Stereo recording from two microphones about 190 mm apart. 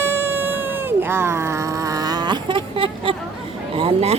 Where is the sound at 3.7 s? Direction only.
30° right (ahead or behind).